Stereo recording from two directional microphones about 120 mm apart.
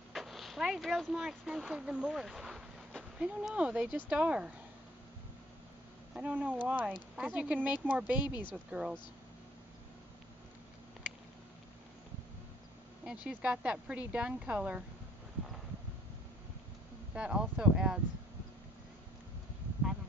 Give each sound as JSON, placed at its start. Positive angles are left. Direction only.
{"t": 0.1, "sound": "speech", "side_deg": 0}
{"t": 3.2, "sound": "speech", "side_deg": -10}
{"t": 6.1, "sound": "speech", "side_deg": -10}
{"t": 8.3, "sound": "speech", "side_deg": 40}
{"t": 8.6, "sound": "speech", "side_deg": -10}
{"t": 13.0, "sound": "speech", "side_deg": -10}
{"t": 17.1, "sound": "speech", "side_deg": -10}